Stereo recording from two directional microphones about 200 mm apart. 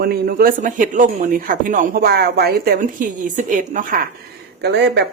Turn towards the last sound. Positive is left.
turn(degrees=-55)  # may be behind; listen again after turning